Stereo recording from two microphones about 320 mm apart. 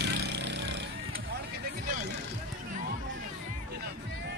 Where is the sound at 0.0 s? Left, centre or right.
Right.